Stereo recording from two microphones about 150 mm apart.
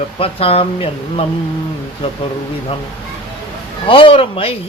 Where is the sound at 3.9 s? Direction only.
35° left (ahead or behind).